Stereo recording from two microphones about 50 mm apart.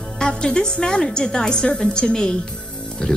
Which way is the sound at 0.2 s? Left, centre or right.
Centre.